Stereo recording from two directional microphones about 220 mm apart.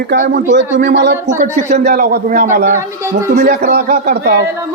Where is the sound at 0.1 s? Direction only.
40° right (ahead or behind).